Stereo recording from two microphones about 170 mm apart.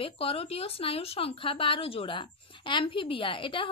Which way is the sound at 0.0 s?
35° left (ahead or behind).